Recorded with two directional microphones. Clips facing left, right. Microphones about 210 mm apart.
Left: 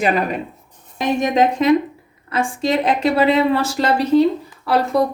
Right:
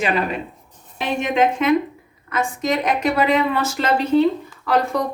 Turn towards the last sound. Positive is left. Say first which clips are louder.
# left 2 dB
turn(degrees=35)  # may be behind; listen again after turning